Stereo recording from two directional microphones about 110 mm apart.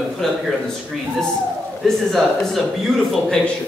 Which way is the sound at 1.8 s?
5° left (ahead or behind).